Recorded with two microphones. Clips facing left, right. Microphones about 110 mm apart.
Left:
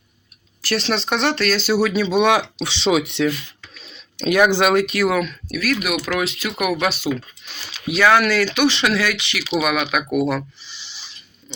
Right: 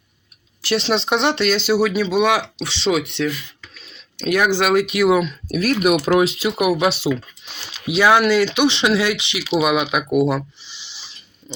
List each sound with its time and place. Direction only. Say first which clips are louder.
0.6 s speech: right 2 dB; 20° right (ahead or behind)
5.5 s speech: right 9 dB; 40° right (ahead or behind)
7.9 s speech: right 1 dB; 15° right (ahead or behind)